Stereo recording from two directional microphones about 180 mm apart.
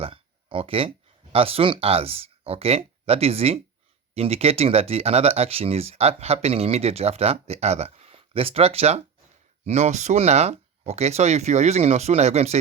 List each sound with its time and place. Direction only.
0.0 s speech: 30° right (ahead or behind)